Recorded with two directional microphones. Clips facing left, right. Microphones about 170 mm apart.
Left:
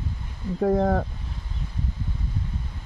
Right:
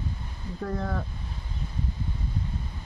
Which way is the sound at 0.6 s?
90° left.